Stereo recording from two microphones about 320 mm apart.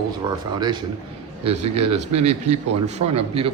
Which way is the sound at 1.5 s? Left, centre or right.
Centre.